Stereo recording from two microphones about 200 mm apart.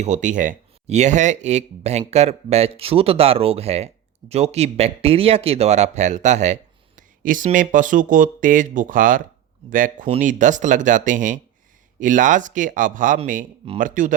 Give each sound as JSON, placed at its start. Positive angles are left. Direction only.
{"t": 0.0, "sound": "speech", "side_deg": -40}